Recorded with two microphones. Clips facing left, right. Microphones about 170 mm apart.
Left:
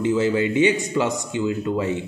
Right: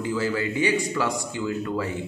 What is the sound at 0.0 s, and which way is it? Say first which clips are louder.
A man's voice: left 6 dB; 20° left (ahead or behind).